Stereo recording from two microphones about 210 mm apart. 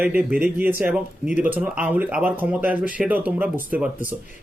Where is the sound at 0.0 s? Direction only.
5° right (ahead or behind).